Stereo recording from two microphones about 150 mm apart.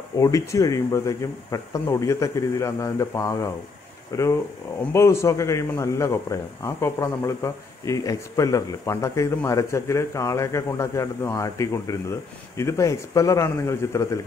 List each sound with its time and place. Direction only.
0.2 s speech: 20° left (ahead or behind)